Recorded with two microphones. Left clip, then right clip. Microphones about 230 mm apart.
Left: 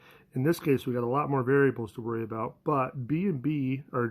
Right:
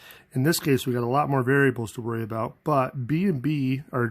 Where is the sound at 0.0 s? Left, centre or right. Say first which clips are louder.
Right 4 dB; right.